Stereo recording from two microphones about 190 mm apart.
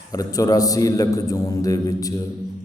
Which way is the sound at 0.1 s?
20° left (ahead or behind).